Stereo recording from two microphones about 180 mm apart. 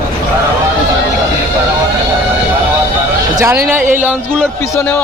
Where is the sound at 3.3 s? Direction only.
15° right (ahead or behind).